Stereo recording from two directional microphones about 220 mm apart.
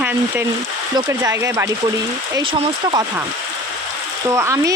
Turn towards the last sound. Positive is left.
turn(degrees=-15)  # may be behind; listen again after turning